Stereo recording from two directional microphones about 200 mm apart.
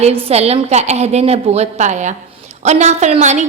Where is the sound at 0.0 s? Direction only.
30° right (ahead or behind).